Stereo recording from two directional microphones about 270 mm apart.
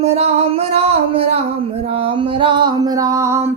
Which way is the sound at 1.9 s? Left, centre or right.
Right.